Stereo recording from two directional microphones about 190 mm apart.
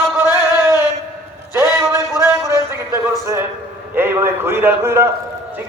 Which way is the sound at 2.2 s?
15° right (ahead or behind).